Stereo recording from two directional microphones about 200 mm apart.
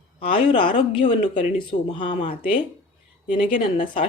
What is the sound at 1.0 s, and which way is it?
A woman's voice, 40° left (ahead or behind).